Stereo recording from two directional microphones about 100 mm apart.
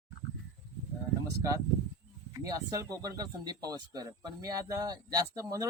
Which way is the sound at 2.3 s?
35° right (ahead or behind).